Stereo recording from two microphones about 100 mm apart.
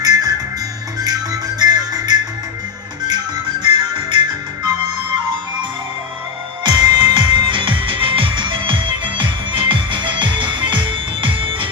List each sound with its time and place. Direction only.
0.0 s music: 40° right (ahead or behind)
3.6 s music: 55° right (ahead or behind)
6.7 s music: 50° right (ahead or behind)